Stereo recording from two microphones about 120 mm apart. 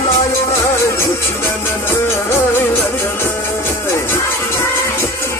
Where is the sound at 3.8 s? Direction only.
20° left (ahead or behind).